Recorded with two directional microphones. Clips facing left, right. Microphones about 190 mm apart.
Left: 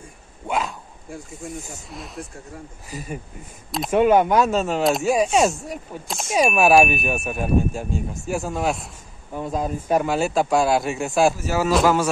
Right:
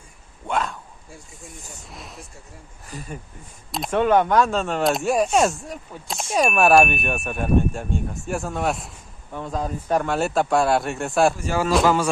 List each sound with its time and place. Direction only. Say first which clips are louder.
0.5 s a sound: even; 5° left (ahead or behind)
1.8 s speech: left 5 dB; centre (ahead or behind)
4.0 s speech: left 1 dB; 10° left (ahead or behind)
9.3 s speech: left 2 dB; 10° left (ahead or behind)